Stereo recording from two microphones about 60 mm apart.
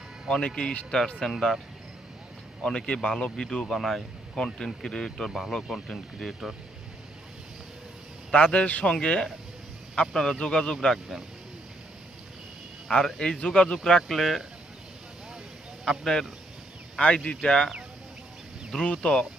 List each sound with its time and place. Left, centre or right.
0.3 s speech: centre
2.6 s speech: centre
8.3 s a man's voice: centre
12.9 s speech: centre
13.7 s speech: centre
15.8 s speech: centre
17.2 s speech: centre
18.9 s speech: centre